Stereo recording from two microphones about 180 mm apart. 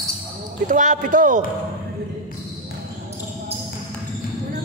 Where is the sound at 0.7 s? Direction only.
45° right (ahead or behind).